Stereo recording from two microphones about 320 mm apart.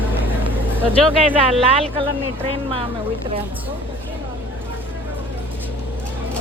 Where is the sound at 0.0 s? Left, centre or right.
Centre.